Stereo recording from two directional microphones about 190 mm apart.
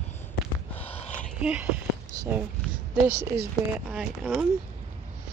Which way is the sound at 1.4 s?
10° right (ahead or behind).